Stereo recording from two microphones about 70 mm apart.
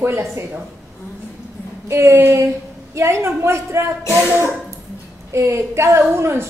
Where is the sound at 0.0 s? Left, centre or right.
Right.